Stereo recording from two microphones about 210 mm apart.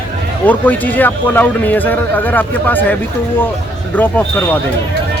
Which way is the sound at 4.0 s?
10° left (ahead or behind).